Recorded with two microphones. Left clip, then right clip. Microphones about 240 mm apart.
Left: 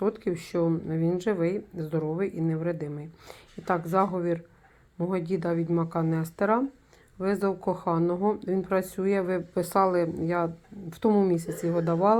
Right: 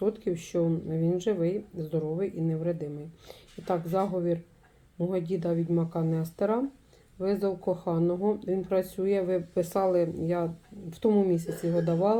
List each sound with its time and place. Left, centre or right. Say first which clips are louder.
0.0 s speech: left 1 dB; left
7.4 s speech: left 2 dB; left